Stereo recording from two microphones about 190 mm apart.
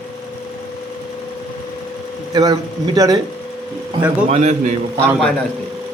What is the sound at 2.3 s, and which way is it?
Speech, 20° right (ahead or behind).